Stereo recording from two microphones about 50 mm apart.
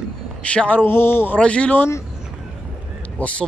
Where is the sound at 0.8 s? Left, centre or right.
Left.